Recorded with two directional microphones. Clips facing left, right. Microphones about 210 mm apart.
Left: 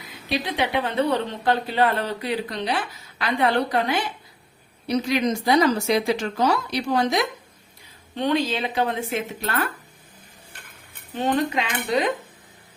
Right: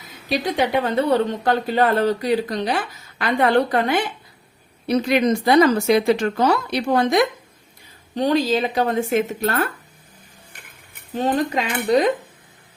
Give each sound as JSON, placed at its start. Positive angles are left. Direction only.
{"t": 0.3, "sound": "speech", "side_deg": -45}
{"t": 8.1, "sound": "speech", "side_deg": -40}
{"t": 11.3, "sound": "speech", "side_deg": -40}